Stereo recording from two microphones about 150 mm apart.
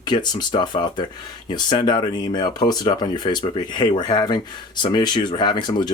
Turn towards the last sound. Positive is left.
turn(degrees=30)  # may be behind; listen again after turning